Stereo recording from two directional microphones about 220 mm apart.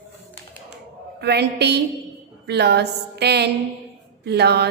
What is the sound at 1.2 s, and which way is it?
A woman's voice, 50° right (ahead or behind).